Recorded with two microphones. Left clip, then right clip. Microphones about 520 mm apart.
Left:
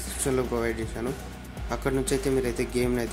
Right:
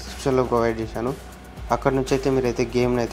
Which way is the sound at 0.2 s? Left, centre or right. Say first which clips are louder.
Right 7 dB; left.